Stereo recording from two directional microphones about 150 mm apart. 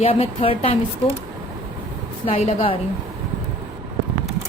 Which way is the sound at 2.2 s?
40° left (ahead or behind).